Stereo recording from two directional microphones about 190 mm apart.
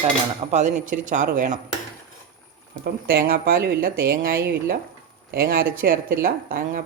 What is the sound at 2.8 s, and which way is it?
Speech, 55° right (ahead or behind).